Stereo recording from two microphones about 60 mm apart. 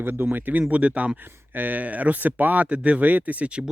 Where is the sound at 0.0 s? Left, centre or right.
Right.